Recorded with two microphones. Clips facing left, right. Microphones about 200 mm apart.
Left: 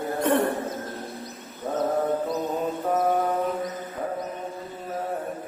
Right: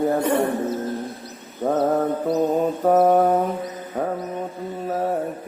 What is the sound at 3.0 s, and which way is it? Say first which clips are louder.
Mantra: right 6 dB; 45° right (ahead or behind).